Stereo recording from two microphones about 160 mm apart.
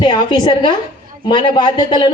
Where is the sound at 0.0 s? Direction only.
30° left (ahead or behind).